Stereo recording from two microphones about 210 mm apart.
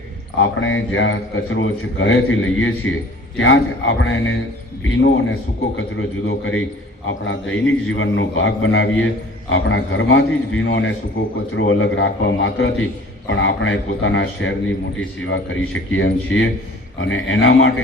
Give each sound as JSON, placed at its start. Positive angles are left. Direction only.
{"t": 0.6, "sound": "a man's voice", "side_deg": 65}